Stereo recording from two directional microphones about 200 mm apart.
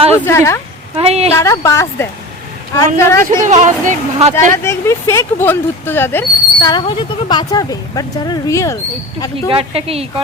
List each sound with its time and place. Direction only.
0.3 s speech: 15° left (ahead or behind)
0.9 s speech: 30° right (ahead or behind)
1.3 s speech: 15° left (ahead or behind)
3.2 s speech: 35° right (ahead or behind)
4.5 s speech: 15° left (ahead or behind)
9.5 s a woman's voice: 30° right (ahead or behind)